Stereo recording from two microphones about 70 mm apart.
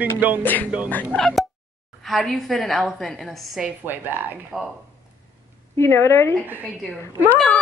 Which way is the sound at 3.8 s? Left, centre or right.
Right.